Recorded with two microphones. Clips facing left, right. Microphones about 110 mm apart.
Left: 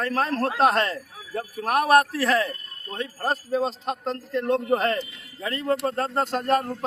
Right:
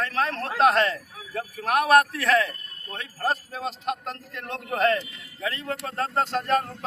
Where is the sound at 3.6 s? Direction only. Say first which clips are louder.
Left 4 dB; 35° left (ahead or behind).